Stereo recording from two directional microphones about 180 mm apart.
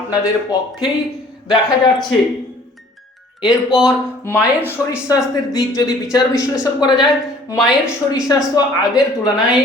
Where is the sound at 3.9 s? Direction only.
15° left (ahead or behind).